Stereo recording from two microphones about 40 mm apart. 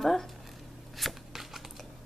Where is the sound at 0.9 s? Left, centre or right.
Centre.